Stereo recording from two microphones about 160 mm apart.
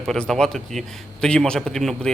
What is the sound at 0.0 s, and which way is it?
A man's voice, 5° left (ahead or behind).